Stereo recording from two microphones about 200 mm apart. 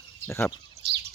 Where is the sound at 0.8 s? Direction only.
55° right (ahead or behind).